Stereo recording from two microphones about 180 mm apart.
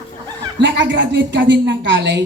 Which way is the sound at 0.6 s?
85° right.